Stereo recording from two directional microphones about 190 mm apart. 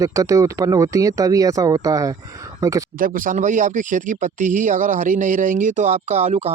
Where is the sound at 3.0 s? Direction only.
45° right (ahead or behind).